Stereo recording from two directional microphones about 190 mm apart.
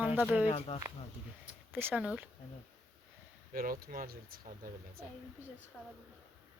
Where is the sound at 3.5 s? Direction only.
50° right (ahead or behind).